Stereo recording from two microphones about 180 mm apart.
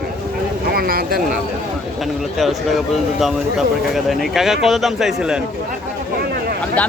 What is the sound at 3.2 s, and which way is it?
Speech, centre (ahead or behind).